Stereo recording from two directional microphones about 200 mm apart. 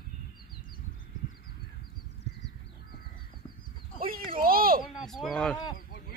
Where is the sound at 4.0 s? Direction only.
45° right (ahead or behind).